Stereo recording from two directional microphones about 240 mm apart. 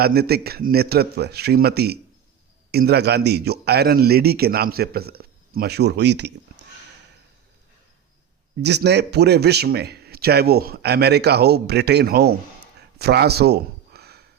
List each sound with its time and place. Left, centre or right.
0.0 s a man's voice: right
8.6 s a man's voice: right
13.0 s a sound: right